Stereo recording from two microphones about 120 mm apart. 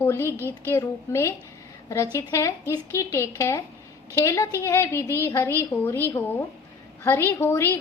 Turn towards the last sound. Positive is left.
turn(degrees=20)  # may be behind; listen again after turning